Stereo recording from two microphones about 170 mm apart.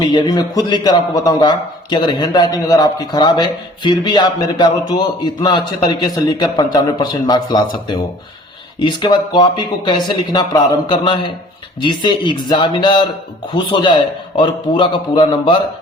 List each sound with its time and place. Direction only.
0.0 s a man's voice: 25° left (ahead or behind)